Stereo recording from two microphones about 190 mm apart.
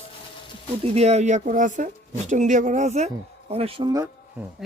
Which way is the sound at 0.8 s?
35° right (ahead or behind).